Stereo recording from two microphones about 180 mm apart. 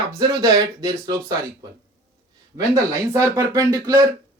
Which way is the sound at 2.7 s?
15° right (ahead or behind).